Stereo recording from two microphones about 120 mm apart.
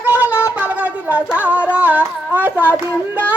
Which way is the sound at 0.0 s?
15° right (ahead or behind).